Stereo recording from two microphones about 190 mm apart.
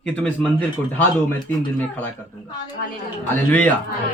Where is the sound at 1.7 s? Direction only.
10° left (ahead or behind).